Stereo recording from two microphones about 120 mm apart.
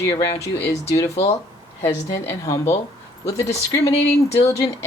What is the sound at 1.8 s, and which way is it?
Speech, 25° left (ahead or behind).